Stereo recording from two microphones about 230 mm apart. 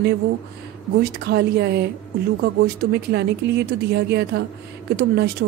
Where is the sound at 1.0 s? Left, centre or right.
Right.